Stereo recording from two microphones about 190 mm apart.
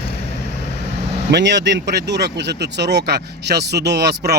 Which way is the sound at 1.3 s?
65° right (ahead or behind).